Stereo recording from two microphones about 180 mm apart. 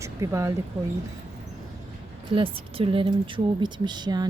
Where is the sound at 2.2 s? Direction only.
30° right (ahead or behind).